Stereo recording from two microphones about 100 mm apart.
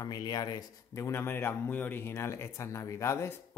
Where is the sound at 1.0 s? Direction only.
25° left (ahead or behind).